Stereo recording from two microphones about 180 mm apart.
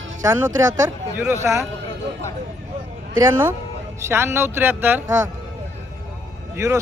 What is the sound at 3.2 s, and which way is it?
Speech, 10° right (ahead or behind).